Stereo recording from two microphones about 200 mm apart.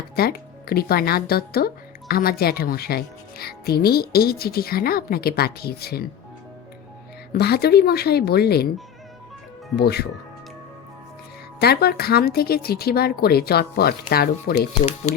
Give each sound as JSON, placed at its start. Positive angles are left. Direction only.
{"t": 0.2, "sound": "speech", "side_deg": 50}
{"t": 7.3, "sound": "speech", "side_deg": 50}
{"t": 9.7, "sound": "speech", "side_deg": 55}
{"t": 11.6, "sound": "speech", "side_deg": 50}